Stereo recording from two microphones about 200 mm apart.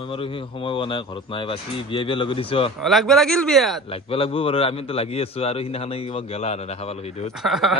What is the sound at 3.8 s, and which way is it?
A man's voice, 30° left (ahead or behind).